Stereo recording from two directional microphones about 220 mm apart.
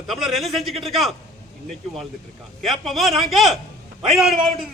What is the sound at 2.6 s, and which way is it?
A man's voice, centre (ahead or behind).